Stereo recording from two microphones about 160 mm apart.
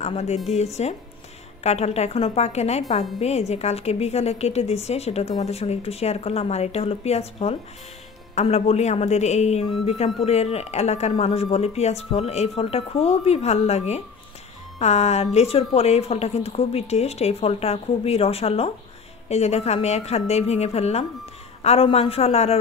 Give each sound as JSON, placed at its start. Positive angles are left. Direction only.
{"t": 0.0, "sound": "a woman's voice", "side_deg": 40}